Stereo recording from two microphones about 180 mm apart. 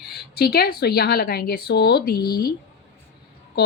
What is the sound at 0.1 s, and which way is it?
Speech, 60° left (ahead or behind).